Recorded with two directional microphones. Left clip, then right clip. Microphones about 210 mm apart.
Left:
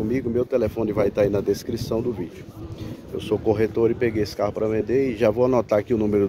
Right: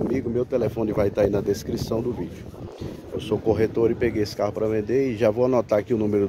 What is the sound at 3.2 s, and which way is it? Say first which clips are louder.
Speech: left 1 dB; 10° left (ahead or behind).